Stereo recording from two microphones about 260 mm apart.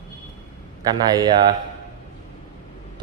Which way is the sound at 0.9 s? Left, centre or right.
Centre.